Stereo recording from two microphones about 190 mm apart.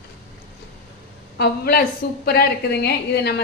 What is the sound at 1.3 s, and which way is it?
A woman's voice, 60° left (ahead or behind).